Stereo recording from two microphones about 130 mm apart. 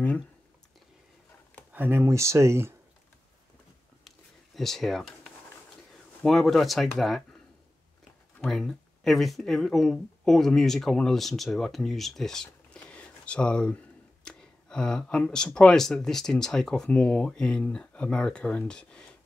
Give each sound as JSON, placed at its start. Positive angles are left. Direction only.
{"t": 1.7, "sound": "speech", "side_deg": -15}
{"t": 4.6, "sound": "speech", "side_deg": 0}
{"t": 8.4, "sound": "speech", "side_deg": 0}